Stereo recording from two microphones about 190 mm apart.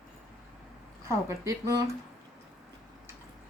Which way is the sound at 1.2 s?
15° right (ahead or behind).